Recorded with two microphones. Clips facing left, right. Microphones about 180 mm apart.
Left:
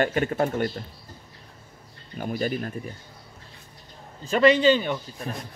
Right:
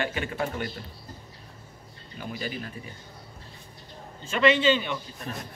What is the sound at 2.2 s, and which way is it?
Speech, 50° left (ahead or behind).